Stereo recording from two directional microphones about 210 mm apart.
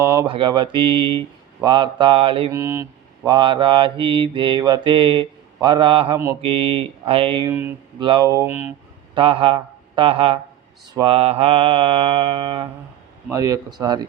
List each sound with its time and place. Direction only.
0.0 s mantra: 15° right (ahead or behind)
2.5 s mantra: 15° right (ahead or behind)
7.5 s mantra: 10° right (ahead or behind)
7.9 s mantra: 20° right (ahead or behind)
9.1 s speech: 25° right (ahead or behind)
10.9 s mantra: 25° right (ahead or behind)